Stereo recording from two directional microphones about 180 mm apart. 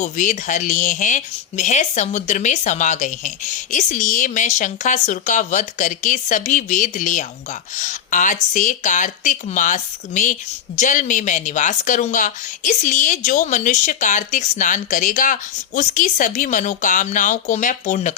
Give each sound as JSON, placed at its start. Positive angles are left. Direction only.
{"t": 0.0, "sound": "speech", "side_deg": 45}